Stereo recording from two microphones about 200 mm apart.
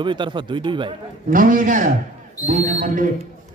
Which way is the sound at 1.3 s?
45° right (ahead or behind).